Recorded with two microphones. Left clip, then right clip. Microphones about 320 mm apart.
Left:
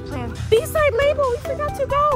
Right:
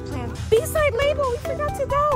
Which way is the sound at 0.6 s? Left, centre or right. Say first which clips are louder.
Left 3 dB; left.